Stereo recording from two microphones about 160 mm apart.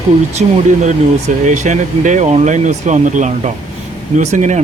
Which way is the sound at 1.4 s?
50° right (ahead or behind).